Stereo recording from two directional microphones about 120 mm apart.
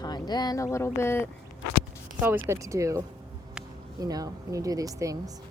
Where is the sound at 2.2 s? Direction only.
20° right (ahead or behind).